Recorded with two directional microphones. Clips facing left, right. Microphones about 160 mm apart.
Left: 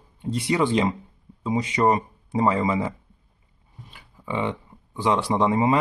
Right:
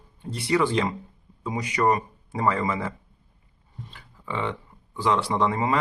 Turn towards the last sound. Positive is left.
turn(degrees=20)  # may be behind; listen again after turning